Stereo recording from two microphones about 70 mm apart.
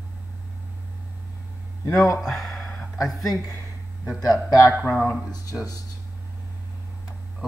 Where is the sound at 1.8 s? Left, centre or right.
Left.